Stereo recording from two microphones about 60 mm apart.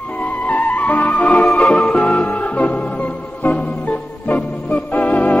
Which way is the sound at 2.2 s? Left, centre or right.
Left.